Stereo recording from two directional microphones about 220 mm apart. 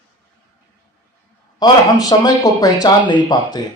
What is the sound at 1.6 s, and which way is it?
Speech, 15° left (ahead or behind).